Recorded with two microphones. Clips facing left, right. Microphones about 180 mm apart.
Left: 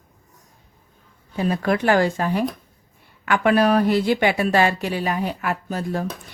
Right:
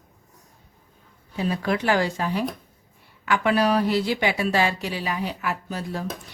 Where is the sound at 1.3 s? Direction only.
50° left (ahead or behind).